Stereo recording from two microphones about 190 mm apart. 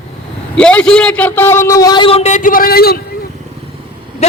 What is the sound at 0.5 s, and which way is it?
A man's voice, 5° left (ahead or behind).